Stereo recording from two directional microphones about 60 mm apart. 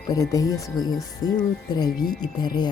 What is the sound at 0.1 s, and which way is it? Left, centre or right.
Speech, left.